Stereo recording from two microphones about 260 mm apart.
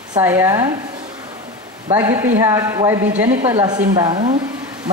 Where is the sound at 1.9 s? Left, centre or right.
Centre.